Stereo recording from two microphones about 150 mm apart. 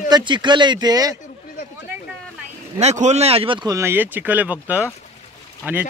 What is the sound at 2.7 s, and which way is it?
Speech, 50° right (ahead or behind).